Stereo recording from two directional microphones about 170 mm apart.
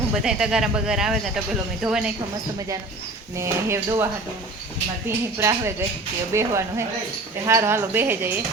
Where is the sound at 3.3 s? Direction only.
15° right (ahead or behind).